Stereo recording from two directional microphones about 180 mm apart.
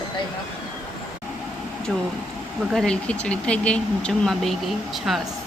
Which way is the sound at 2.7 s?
5° left (ahead or behind).